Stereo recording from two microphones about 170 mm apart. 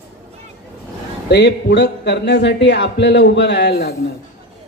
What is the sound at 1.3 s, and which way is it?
A woman's voice, 85° left.